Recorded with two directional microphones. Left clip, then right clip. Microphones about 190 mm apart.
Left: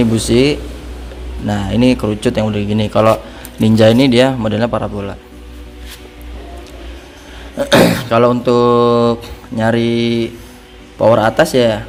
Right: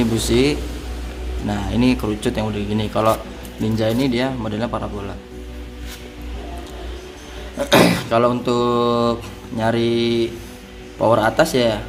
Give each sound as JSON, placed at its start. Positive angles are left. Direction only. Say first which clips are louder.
{"t": 0.0, "sound": "speech", "louder": "left 5 dB", "side_deg": 20}
{"t": 3.6, "sound": "a man's voice", "louder": "left 10 dB", "side_deg": 40}
{"t": 7.6, "sound": "a sound", "louder": "left 4 dB", "side_deg": 25}
{"t": 9.6, "sound": "speech", "louder": "left 4 dB", "side_deg": 25}